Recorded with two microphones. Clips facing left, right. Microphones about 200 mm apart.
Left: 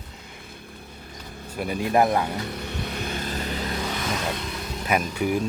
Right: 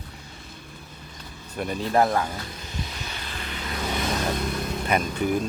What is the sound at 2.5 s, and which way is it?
Vehicle, 65° left (ahead or behind).